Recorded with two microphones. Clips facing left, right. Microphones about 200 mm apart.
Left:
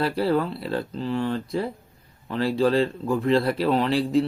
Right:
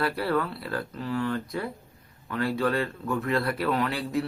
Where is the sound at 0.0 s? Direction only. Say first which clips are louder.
Left 4 dB; 25° left (ahead or behind).